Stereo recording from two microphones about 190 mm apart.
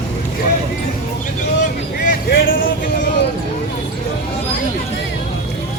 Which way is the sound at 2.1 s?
50° left (ahead or behind).